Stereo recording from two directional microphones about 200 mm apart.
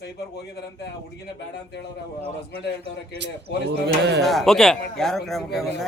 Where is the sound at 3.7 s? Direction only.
60° right (ahead or behind).